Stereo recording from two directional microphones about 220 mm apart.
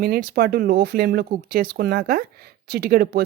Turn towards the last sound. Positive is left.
turn(degrees=-45)  # may be behind; listen again after turning